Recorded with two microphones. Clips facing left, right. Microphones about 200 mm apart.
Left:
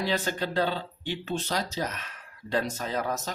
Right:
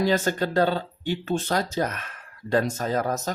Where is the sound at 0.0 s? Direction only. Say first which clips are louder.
Right 6 dB; 45° right (ahead or behind).